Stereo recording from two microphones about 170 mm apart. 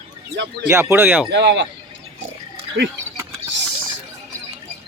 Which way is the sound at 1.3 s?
90° right.